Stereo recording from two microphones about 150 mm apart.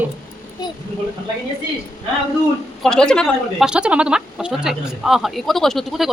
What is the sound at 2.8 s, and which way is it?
Speech, 5° left (ahead or behind).